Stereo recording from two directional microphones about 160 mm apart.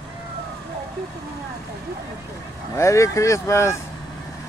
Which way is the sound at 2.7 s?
20° left (ahead or behind).